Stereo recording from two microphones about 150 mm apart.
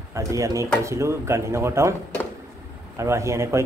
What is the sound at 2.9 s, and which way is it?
Speech, 20° right (ahead or behind).